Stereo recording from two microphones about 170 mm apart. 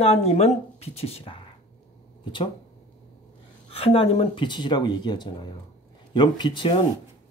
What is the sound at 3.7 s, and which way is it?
Speech, 35° left (ahead or behind).